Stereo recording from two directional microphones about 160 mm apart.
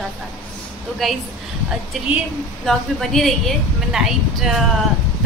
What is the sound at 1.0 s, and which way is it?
Speech, centre (ahead or behind).